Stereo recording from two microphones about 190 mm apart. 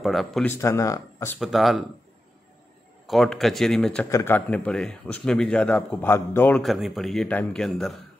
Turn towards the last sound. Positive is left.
turn(degrees=0)  # may be behind; listen again after turning